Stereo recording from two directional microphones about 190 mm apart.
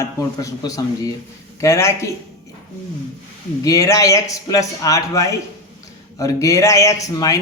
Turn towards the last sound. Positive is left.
turn(degrees=15)  # may be behind; listen again after turning